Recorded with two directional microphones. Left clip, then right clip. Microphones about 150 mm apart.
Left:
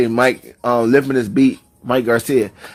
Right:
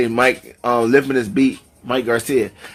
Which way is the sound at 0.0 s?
35° left (ahead or behind).